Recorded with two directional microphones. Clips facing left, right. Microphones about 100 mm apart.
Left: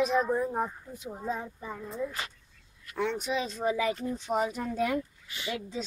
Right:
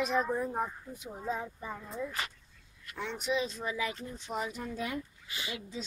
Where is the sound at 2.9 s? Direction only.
55° left (ahead or behind).